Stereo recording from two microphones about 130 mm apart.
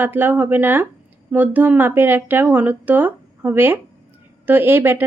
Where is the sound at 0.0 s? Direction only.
15° right (ahead or behind).